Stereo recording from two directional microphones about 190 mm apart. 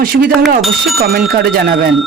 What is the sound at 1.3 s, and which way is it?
Speech, 55° right (ahead or behind).